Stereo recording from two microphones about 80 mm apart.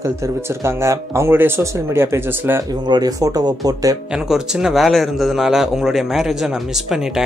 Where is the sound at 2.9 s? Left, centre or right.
Right.